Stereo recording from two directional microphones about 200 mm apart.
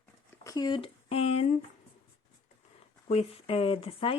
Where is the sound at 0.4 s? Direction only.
20° left (ahead or behind).